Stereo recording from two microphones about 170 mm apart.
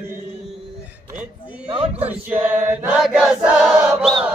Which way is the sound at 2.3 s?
10° right (ahead or behind).